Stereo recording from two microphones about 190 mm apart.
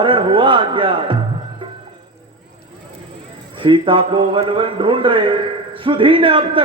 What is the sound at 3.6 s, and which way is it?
A man's voice, 25° right (ahead or behind).